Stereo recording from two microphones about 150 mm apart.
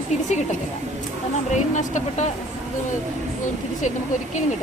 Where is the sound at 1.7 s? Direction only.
55° left (ahead or behind).